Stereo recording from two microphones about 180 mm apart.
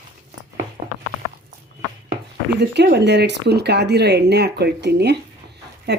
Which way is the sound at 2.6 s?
65° right (ahead or behind).